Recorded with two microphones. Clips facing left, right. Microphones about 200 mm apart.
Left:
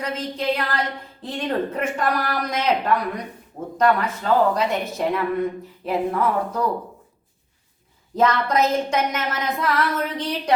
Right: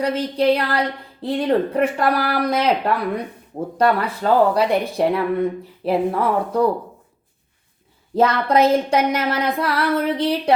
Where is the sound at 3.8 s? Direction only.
35° right (ahead or behind).